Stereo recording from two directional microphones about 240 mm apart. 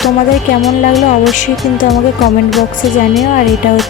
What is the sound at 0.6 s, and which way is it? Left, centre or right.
Speech, centre.